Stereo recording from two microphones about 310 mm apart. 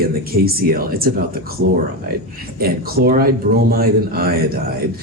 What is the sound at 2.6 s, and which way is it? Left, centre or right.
Speech, right.